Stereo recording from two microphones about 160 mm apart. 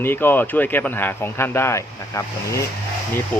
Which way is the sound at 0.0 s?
15° left (ahead or behind).